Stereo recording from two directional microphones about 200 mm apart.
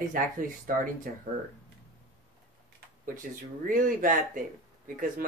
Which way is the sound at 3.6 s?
40° right (ahead or behind).